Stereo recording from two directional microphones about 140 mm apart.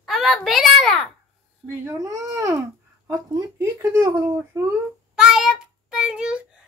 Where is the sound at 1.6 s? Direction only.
20° right (ahead or behind).